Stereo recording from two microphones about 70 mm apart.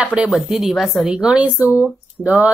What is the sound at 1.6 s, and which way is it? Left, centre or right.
Speech, right.